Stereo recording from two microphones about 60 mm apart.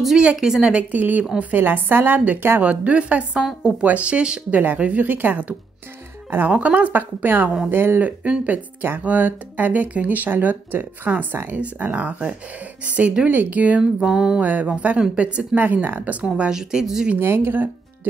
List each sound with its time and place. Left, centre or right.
0.2 s a woman's voice: centre
0.9 s a woman's voice: right
8.0 s speech: right
14.4 s speech: right
16.3 s a woman's voice: centre
17.2 s a woman's voice: right